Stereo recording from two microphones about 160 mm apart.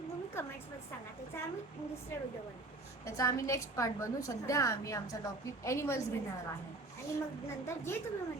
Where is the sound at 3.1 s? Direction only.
20° left (ahead or behind).